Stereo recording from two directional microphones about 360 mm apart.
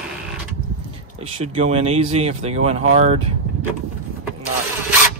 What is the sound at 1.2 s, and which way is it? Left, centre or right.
Speech, centre.